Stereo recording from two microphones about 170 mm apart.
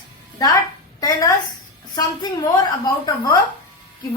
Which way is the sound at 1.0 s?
20° left (ahead or behind).